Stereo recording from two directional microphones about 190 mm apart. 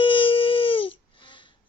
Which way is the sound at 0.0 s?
25° left (ahead or behind).